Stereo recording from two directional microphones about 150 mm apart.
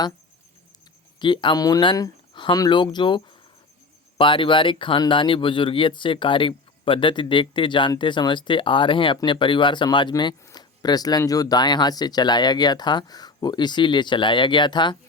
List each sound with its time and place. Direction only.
1.2 s speech: 30° left (ahead or behind)